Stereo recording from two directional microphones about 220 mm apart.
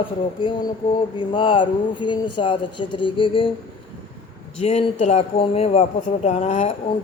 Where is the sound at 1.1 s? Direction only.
20° left (ahead or behind).